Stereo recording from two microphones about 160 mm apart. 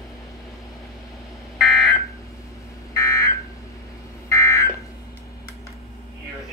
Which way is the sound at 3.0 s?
20° left (ahead or behind).